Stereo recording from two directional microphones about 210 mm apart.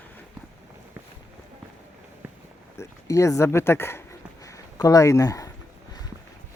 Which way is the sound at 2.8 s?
15° left (ahead or behind).